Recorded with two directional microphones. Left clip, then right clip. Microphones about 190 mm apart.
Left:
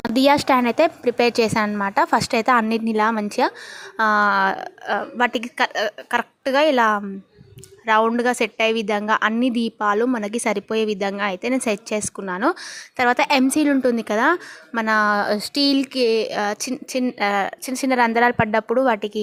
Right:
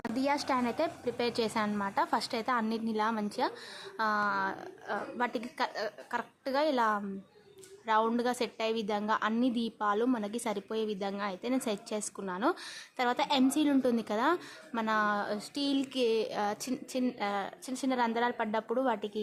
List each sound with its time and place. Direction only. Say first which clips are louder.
0.0 s a woman's voice: left 15 dB; 40° left (ahead or behind)